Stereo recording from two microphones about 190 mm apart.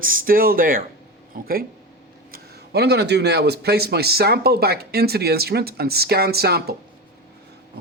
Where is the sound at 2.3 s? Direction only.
60° right (ahead or behind).